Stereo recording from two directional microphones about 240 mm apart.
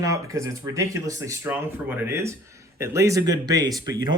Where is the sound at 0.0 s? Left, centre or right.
Centre.